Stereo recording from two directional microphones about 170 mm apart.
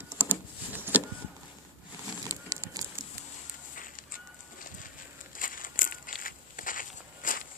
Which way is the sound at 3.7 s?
55° left (ahead or behind).